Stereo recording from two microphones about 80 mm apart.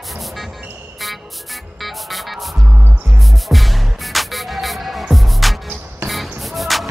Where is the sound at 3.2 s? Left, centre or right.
Centre.